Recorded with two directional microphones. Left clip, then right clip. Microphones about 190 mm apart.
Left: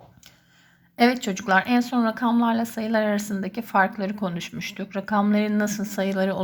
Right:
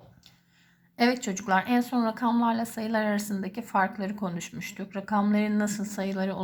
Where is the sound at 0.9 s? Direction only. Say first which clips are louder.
Left 5 dB; 15° left (ahead or behind).